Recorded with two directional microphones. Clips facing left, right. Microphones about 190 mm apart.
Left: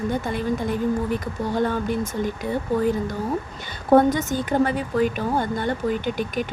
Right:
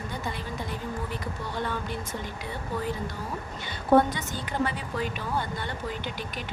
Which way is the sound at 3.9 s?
45° left (ahead or behind).